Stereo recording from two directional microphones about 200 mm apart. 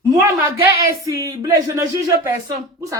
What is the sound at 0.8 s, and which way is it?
A woman's voice, 15° right (ahead or behind).